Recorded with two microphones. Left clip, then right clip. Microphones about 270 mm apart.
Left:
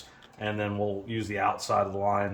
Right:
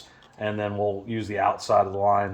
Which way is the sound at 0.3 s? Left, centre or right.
Right.